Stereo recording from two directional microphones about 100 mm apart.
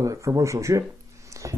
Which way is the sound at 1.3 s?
30° right (ahead or behind).